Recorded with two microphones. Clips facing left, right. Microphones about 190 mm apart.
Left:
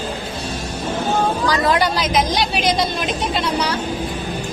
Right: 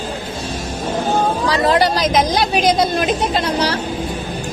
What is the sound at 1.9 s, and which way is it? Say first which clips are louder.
Speech: right 3 dB; 45° right (ahead or behind).